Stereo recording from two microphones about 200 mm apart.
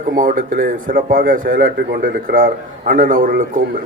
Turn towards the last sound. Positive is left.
turn(degrees=-45)  # may be behind; listen again after turning